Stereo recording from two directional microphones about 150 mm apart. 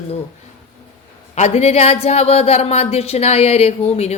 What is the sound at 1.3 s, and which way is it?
A woman's voice, 45° left (ahead or behind).